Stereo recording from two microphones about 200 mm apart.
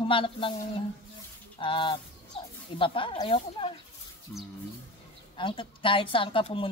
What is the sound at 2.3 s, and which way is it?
Snake, 30° left (ahead or behind).